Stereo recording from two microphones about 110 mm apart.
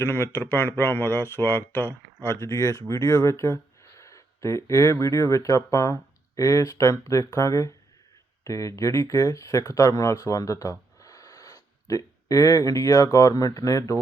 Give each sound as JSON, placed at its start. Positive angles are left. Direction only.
{"t": 0.0, "sound": "speech", "side_deg": 20}